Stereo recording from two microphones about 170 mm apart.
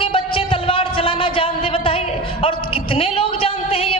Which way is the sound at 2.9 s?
35° left (ahead or behind).